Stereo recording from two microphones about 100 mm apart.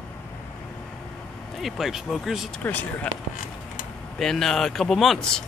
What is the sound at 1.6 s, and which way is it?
Speech, 5° right (ahead or behind).